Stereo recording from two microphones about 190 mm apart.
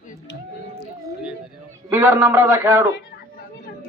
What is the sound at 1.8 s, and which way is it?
A man's voice, 10° right (ahead or behind).